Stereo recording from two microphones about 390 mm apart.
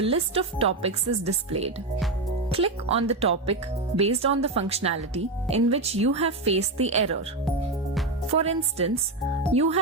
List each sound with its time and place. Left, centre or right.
0.0 s speech: centre
8.3 s speech: centre